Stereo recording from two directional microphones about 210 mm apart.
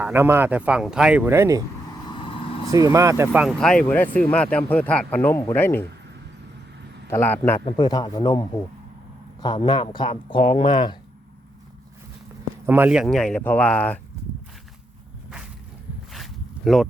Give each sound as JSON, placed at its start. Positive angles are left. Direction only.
{"t": 0.0, "sound": "speech", "side_deg": -10}
{"t": 2.0, "sound": "vehicle", "side_deg": 25}
{"t": 2.6, "sound": "speech", "side_deg": -15}
{"t": 7.1, "sound": "speech", "side_deg": 10}
{"t": 7.6, "sound": "speech", "side_deg": 20}
{"t": 12.6, "sound": "speech", "side_deg": -10}
{"t": 16.1, "sound": "zipper", "side_deg": 0}